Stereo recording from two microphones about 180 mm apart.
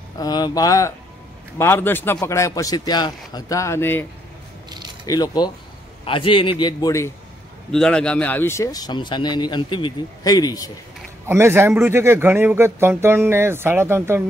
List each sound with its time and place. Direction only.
0.2 s a man's voice: 20° left (ahead or behind)
4.6 s a sound: 25° right (ahead or behind)
5.0 s speech: 20° left (ahead or behind)
7.7 s speech: 5° left (ahead or behind); by 10.7 s 20° left (ahead or behind)
11.2 s speech: 15° right (ahead or behind)